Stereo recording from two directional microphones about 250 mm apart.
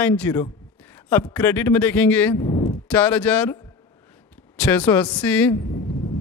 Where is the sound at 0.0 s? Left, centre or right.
Centre.